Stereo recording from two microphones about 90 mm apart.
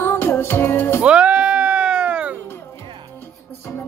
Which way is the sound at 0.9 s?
10° right (ahead or behind).